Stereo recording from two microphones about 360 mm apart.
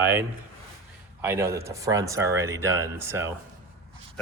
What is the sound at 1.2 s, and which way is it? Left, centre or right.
Speech, centre.